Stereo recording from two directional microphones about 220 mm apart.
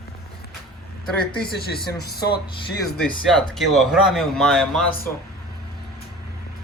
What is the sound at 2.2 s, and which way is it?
Speech, 45° left (ahead or behind).